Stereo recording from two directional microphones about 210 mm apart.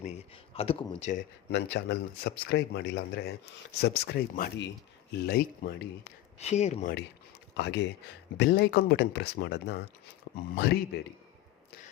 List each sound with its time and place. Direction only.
0.5 s speech: 25° left (ahead or behind)
1.5 s speech: 55° left (ahead or behind)
6.4 s speech: 30° left (ahead or behind)
7.5 s speech: 55° left (ahead or behind)